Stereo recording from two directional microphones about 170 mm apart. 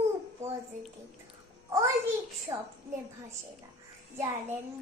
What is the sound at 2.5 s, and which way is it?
Speech, 25° right (ahead or behind).